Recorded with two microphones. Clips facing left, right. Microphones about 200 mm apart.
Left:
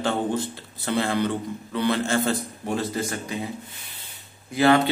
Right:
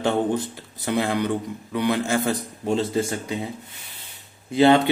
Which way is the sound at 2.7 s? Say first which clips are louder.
Right 4 dB; 25° right (ahead or behind).